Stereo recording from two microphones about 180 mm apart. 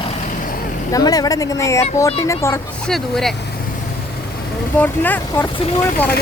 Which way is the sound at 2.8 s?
Centre (ahead or behind).